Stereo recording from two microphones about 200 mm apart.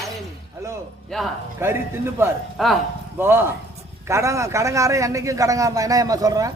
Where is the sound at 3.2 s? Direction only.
10° right (ahead or behind).